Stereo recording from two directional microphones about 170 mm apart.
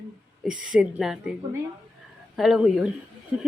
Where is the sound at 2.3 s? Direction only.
Centre (ahead or behind).